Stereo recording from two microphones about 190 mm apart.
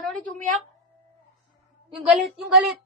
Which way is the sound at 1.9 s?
5° right (ahead or behind).